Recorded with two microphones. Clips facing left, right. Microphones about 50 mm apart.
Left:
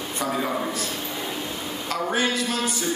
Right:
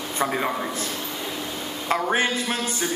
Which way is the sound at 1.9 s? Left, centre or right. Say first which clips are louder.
Right 2 dB; right.